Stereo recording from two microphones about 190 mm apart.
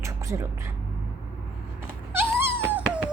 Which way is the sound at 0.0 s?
15° right (ahead or behind).